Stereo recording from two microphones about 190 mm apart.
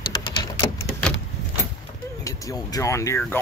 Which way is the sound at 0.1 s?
20° left (ahead or behind).